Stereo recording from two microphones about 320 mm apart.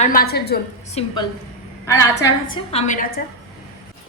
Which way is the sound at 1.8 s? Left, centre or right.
Centre.